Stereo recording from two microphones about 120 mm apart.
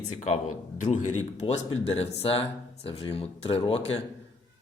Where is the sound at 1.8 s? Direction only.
60° left (ahead or behind).